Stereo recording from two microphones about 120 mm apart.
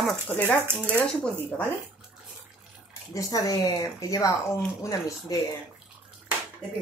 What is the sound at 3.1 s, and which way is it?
Speech, 30° left (ahead or behind).